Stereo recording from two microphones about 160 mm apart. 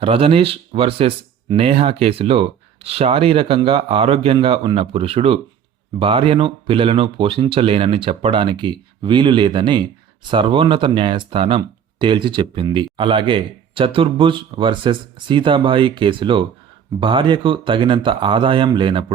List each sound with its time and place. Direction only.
0.0 s speech: 35° right (ahead or behind)